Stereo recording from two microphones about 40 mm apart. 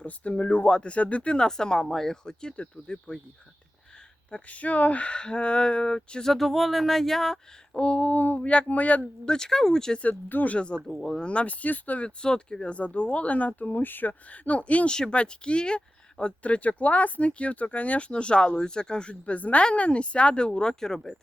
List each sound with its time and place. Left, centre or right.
0.0 s speech: left
1.4 s speech: centre
2.2 s speech: centre
4.3 s speech: left
6.3 s speech: centre
7.8 s speech: left
9.2 s speech: centre
10.0 s speech: left
10.5 s speech: left
12.0 s speech: left
14.1 s speech: left
14.8 s speech: left
16.4 s speech: left
18.1 s speech: left; by 21.2 s centre